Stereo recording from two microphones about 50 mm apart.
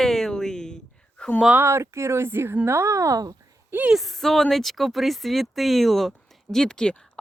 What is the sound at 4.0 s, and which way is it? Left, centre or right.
A woman's voice, centre.